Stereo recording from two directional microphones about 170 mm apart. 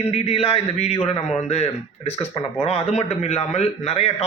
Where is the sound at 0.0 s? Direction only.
35° left (ahead or behind).